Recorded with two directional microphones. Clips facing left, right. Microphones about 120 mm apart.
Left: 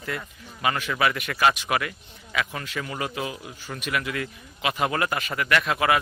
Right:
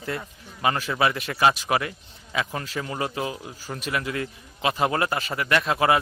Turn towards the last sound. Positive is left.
turn(degrees=-30)  # may be behind; listen again after turning